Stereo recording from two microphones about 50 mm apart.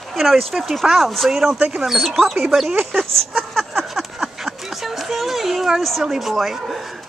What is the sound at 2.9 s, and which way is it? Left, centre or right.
Speech, right.